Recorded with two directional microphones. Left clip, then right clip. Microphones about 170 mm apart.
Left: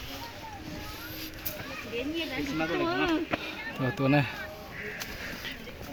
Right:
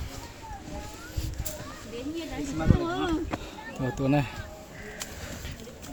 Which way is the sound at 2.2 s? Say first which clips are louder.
Even; 15° right (ahead or behind).